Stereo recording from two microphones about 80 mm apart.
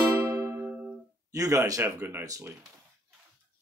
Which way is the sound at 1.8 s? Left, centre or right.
Right.